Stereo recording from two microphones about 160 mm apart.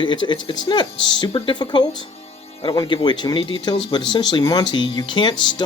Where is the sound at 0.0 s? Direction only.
30° left (ahead or behind).